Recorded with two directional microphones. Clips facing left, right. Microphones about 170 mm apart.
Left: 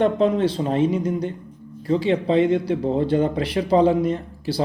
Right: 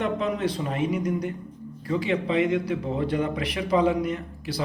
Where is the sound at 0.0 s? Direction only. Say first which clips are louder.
Left 7 dB; 30° left (ahead or behind).